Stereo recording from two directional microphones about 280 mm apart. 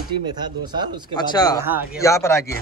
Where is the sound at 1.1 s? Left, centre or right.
Centre.